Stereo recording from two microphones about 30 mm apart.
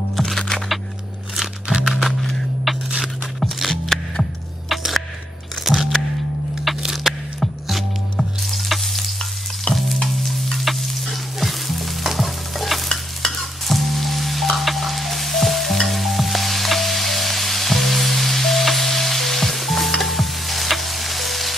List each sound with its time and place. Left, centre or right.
0.4 s music: left
1.3 s music: centre
1.9 s music: centre
2.7 s a sound: centre
3.5 s music: centre
3.9 s music: centre
8.2 s sizzle: centre
9.7 s stir: left
10.6 s stir: centre
13.4 s music: centre
20.0 s stir: centre